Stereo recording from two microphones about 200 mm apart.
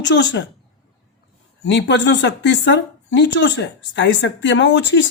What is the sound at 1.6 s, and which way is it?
Speech, 65° left (ahead or behind).